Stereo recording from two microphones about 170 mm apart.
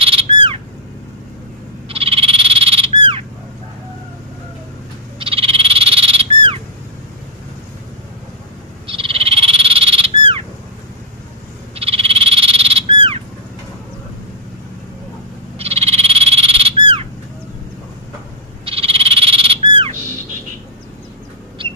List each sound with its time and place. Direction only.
0.0 s bird: 30° right (ahead or behind)
1.9 s frog: 35° right (ahead or behind)
5.2 s frog: 35° right (ahead or behind)
8.8 s frog: 30° right (ahead or behind)
11.7 s frog: 35° right (ahead or behind)
15.5 s frog: 35° right (ahead or behind)
18.7 s frog: 35° right (ahead or behind)
21.6 s bird: 30° right (ahead or behind)